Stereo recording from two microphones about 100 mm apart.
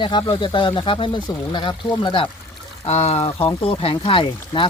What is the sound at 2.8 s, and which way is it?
Speech, 90° left.